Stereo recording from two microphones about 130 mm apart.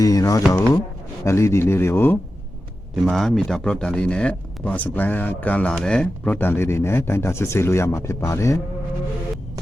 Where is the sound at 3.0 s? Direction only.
Centre (ahead or behind); by 8.6 s 25° left (ahead or behind).